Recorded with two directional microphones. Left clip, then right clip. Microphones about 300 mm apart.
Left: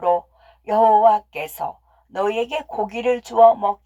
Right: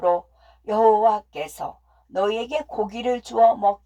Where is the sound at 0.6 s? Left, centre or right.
Left.